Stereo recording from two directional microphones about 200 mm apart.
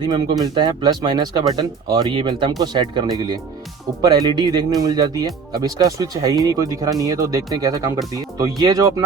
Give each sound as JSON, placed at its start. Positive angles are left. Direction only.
{"t": 0.0, "sound": "speech", "side_deg": -20}